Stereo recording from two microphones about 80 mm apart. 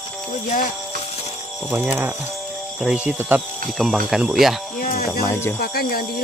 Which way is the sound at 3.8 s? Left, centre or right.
Centre.